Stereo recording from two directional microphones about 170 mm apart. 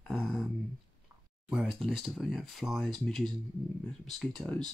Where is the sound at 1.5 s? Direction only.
Centre (ahead or behind).